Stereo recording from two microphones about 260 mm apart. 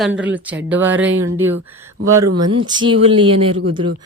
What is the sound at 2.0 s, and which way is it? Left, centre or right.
Speech, centre.